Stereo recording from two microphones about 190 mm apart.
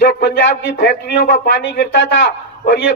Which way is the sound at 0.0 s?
60° left (ahead or behind).